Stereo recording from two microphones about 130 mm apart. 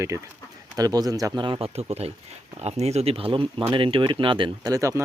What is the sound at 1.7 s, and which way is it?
Speech, 55° right (ahead or behind).